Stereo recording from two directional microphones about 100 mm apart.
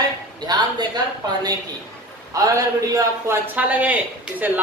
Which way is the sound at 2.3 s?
35° right (ahead or behind).